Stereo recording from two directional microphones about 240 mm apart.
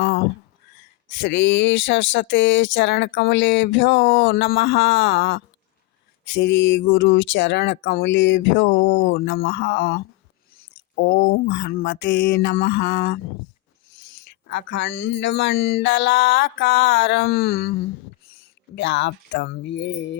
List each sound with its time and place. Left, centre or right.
1.2 s speech: left
14.4 s speech: left